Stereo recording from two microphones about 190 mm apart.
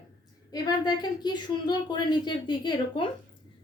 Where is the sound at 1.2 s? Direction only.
20° left (ahead or behind).